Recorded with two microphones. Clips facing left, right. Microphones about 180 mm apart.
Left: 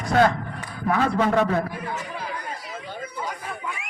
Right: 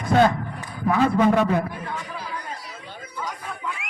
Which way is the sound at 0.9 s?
15° right (ahead or behind).